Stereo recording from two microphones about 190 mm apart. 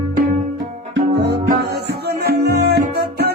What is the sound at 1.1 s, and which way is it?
Music, 60° right (ahead or behind).